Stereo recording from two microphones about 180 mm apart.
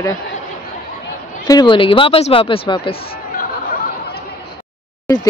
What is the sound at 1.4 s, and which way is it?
Speech, 25° left (ahead or behind).